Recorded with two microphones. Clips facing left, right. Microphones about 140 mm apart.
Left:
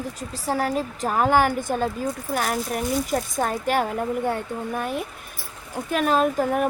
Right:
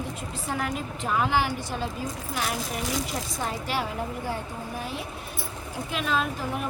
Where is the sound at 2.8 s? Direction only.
90° right.